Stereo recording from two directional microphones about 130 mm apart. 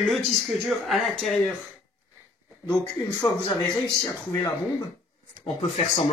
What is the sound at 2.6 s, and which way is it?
Speech, 25° left (ahead or behind).